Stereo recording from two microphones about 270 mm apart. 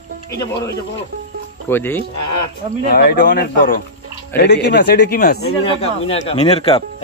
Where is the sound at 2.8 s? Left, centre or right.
Left.